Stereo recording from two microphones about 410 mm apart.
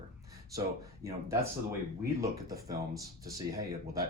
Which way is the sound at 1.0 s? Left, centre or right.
Centre.